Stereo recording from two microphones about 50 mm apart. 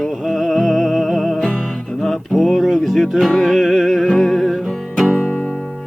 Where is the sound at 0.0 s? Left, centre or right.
Centre.